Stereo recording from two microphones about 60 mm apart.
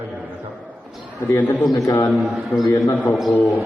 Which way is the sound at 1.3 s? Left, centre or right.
Left.